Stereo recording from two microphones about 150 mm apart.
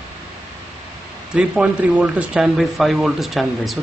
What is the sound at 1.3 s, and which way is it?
Speech, 5° right (ahead or behind).